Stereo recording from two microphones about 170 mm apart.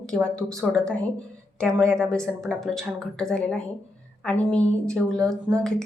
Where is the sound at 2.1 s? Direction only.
5° left (ahead or behind).